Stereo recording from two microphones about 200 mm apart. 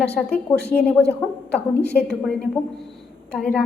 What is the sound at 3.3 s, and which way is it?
Speech, 5° left (ahead or behind).